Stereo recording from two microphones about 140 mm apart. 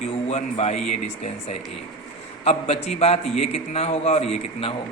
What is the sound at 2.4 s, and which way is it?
A man's voice, 50° left (ahead or behind).